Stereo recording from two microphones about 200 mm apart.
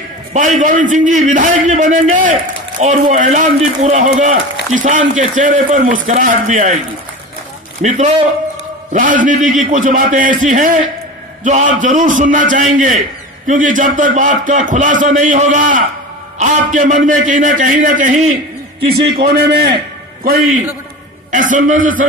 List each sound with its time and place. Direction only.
0.3 s speech: 35° right (ahead or behind)
7.8 s a man's voice: 35° right (ahead or behind)
21.3 s speech: 40° right (ahead or behind)